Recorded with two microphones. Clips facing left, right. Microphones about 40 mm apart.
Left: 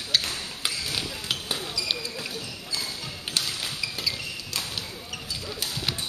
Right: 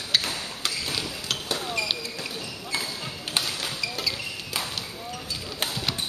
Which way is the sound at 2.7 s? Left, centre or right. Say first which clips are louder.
Right 3 dB; right.